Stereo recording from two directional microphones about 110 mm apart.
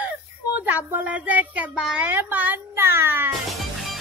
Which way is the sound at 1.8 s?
5° right (ahead or behind).